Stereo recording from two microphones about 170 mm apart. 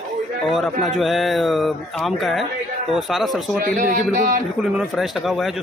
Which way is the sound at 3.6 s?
50° right (ahead or behind).